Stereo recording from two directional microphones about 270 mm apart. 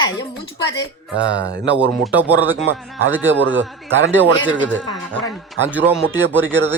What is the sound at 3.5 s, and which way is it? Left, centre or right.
Speech, right.